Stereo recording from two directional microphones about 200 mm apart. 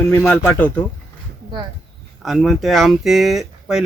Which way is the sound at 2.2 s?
Centre (ahead or behind).